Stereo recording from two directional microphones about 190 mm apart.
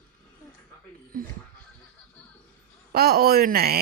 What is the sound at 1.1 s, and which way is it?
Speech, 45° right (ahead or behind).